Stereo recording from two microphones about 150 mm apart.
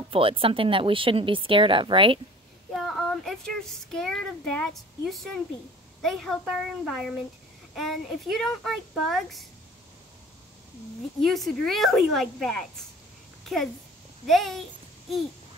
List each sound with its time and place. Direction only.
0.1 s speech: 35° right (ahead or behind)
2.7 s speech: centre (ahead or behind)
6.0 s speech: centre (ahead or behind)
11.2 s speech: centre (ahead or behind)
14.2 s speech: centre (ahead or behind)